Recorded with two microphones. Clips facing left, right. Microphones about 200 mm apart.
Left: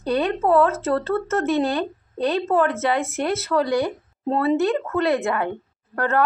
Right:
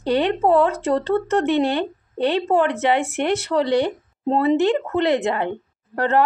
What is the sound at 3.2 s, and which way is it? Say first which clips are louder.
Speech: right 2 dB; 25° right (ahead or behind).